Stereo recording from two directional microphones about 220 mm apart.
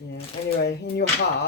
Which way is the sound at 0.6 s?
50° left (ahead or behind).